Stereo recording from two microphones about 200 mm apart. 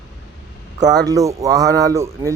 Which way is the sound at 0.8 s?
20° right (ahead or behind).